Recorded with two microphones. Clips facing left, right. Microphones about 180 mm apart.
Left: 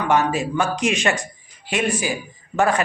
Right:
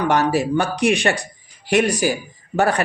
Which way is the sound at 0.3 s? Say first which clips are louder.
Right 3 dB; 60° right (ahead or behind).